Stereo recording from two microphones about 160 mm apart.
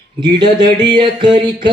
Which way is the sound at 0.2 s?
30° right (ahead or behind).